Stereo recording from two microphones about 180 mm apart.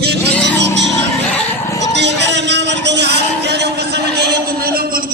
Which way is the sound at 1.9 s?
75° right (ahead or behind).